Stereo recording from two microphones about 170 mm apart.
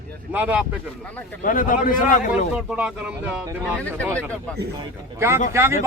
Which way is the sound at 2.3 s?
5° right (ahead or behind).